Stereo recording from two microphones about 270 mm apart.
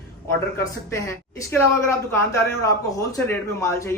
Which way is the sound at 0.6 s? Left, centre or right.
Centre.